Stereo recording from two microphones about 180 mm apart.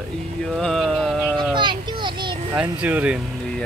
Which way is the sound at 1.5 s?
25° right (ahead or behind).